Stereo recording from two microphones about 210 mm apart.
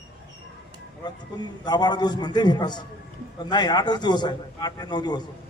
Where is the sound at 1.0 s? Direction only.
20° left (ahead or behind).